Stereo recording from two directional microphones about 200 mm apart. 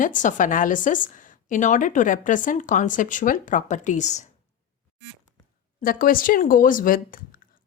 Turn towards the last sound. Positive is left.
turn(degrees=45)  # may be behind; listen again after turning